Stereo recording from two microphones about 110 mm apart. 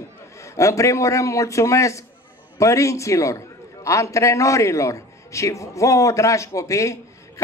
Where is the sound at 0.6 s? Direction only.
30° left (ahead or behind).